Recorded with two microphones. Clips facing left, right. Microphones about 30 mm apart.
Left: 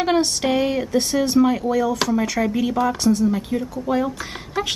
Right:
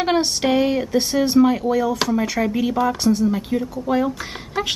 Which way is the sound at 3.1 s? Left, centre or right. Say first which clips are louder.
Even; centre.